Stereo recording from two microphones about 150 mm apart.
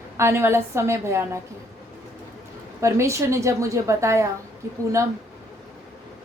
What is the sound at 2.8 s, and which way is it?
A woman's voice, 20° right (ahead or behind).